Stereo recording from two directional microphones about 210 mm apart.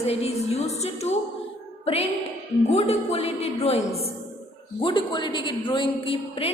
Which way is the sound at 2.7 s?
30° left (ahead or behind).